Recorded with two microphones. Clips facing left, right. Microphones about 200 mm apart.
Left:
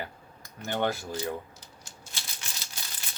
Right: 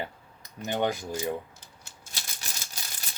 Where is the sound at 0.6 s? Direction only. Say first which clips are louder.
Right 1 dB; 15° right (ahead or behind).